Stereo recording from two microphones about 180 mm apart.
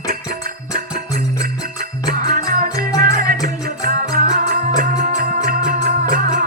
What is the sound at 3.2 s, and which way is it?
Music, 50° right (ahead or behind).